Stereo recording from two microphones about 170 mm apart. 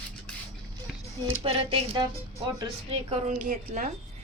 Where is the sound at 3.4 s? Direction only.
55° right (ahead or behind).